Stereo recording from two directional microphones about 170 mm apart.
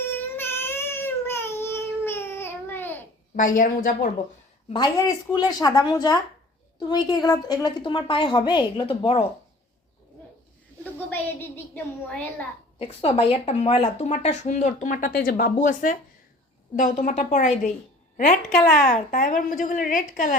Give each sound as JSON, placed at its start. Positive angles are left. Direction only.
{"t": 0.1, "sound": "child singing", "side_deg": 15}
{"t": 3.3, "sound": "a woman's voice", "side_deg": 50}
{"t": 4.7, "sound": "a woman's voice", "side_deg": 25}
{"t": 11.1, "sound": "a woman's voice", "side_deg": 10}
{"t": 12.8, "sound": "a woman's voice", "side_deg": 35}
{"t": 18.9, "sound": "a woman's voice", "side_deg": 45}